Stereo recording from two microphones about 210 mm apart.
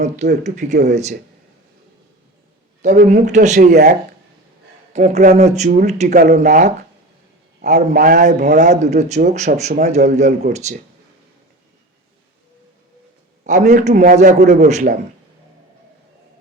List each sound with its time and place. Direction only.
0.2 s a man's voice: 35° right (ahead or behind)
2.8 s a man's voice: 35° right (ahead or behind)
4.9 s a man's voice: 35° right (ahead or behind)
13.4 s a man's voice: 35° right (ahead or behind)